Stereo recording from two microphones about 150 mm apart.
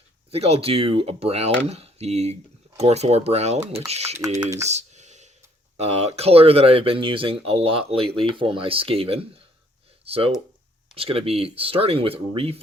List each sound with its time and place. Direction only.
0.3 s speech: 45° right (ahead or behind)
4.7 s clicking: 50° right (ahead or behind)
5.7 s speech: 45° right (ahead or behind)